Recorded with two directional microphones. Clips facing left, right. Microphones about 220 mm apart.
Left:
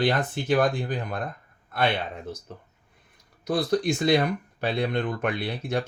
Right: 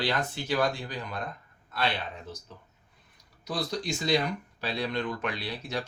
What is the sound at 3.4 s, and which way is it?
Speech, 55° left (ahead or behind).